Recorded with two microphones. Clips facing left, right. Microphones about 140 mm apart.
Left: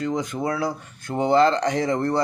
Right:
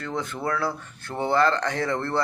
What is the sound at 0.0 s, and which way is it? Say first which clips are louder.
A man's voice: left 4 dB; 15° left (ahead or behind).